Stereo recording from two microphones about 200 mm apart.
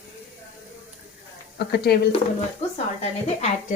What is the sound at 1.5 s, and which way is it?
Speech, 50° left (ahead or behind).